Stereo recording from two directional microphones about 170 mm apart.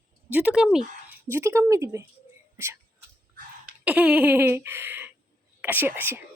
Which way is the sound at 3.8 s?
10° right (ahead or behind).